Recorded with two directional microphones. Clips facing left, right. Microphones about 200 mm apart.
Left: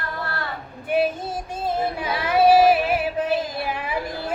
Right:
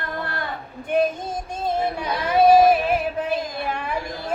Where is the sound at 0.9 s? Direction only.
5° left (ahead or behind).